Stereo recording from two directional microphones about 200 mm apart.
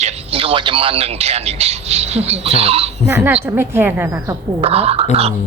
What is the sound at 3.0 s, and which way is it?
A woman's voice, 10° right (ahead or behind).